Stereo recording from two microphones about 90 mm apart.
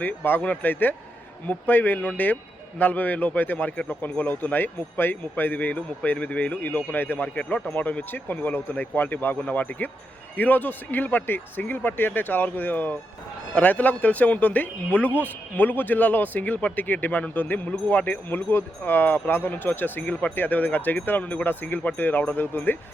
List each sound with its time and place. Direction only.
0.0 s a man's voice: 20° left (ahead or behind)